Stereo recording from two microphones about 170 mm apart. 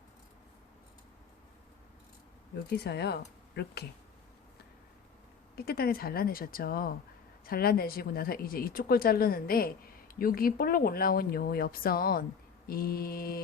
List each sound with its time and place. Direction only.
2.6 s speech: 75° left (ahead or behind)
5.5 s a woman's voice: 65° left (ahead or behind)